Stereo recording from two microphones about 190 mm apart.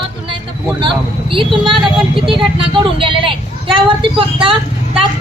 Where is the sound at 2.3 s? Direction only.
25° right (ahead or behind).